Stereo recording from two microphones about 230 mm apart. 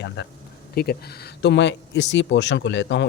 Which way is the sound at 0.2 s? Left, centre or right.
Left.